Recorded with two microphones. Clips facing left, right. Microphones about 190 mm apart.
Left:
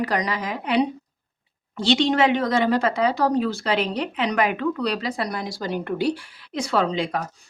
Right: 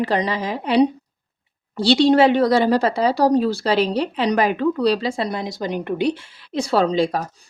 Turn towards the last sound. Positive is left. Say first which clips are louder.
# right 5 dB
turn(degrees=-35)  # may be behind; listen again after turning